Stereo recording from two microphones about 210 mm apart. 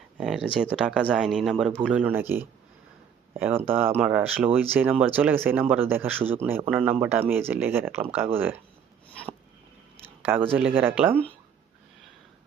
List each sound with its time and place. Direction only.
0.2 s speech: 5° right (ahead or behind)
10.6 s speech: 10° right (ahead or behind)